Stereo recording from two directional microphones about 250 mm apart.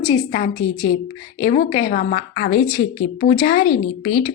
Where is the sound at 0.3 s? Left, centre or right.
Left.